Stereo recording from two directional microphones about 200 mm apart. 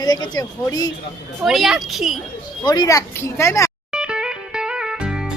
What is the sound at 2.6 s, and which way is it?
Speech, 20° left (ahead or behind).